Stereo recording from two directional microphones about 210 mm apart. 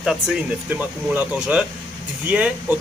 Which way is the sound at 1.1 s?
5° right (ahead or behind).